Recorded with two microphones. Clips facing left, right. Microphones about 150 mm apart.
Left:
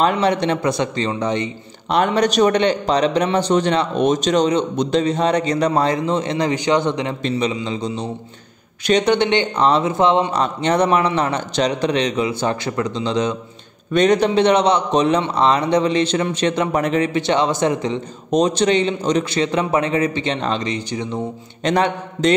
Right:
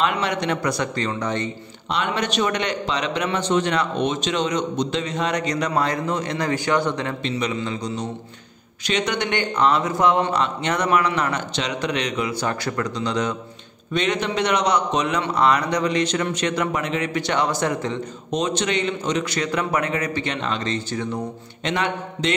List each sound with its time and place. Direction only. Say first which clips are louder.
0.0 s a man's voice: left 6 dB; 35° left (ahead or behind)
1.9 s a man's voice: left 7 dB; 45° left (ahead or behind); by 13.4 s 20° left (ahead or behind)
13.9 s a man's voice: left 8 dB; 40° left (ahead or behind)
16.8 s a man's voice: left 7 dB; 40° left (ahead or behind)
17.1 s a man's voice: left 4 dB; 25° left (ahead or behind)
18.3 s a man's voice: left 7 dB; 35° left (ahead or behind)
20.6 s speech: left 2 dB; 15° left (ahead or behind)
21.6 s a man's voice: left 6 dB; 40° left (ahead or behind)